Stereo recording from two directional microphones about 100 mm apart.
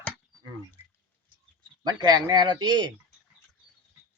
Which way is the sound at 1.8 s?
40° right (ahead or behind).